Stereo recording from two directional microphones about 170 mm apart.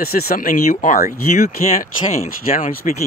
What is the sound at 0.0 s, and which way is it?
Speech, 60° left (ahead or behind).